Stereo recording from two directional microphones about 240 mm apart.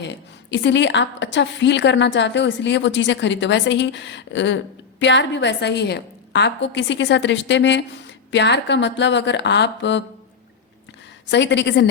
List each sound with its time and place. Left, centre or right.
0.0 s a woman's voice: left
11.3 s a woman's voice: left